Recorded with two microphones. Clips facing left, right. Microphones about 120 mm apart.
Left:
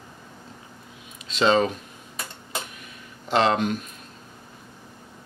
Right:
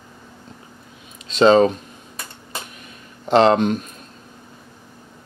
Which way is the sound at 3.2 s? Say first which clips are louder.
Right 7 dB; 35° right (ahead or behind).